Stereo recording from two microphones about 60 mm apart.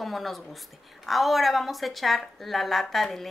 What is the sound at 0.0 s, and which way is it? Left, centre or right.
A woman's voice, centre.